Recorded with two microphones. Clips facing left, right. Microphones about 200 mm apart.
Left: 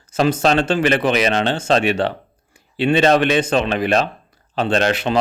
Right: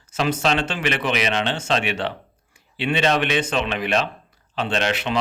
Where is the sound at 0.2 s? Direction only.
35° left (ahead or behind).